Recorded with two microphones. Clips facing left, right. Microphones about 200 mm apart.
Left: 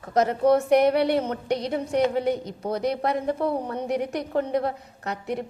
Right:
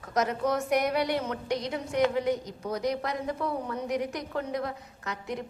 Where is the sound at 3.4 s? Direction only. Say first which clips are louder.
Left 5 dB; 30° left (ahead or behind).